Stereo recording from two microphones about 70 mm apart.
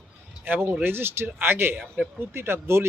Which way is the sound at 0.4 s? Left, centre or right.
Right.